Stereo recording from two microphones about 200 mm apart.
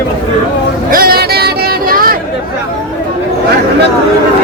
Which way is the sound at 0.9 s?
50° right (ahead or behind).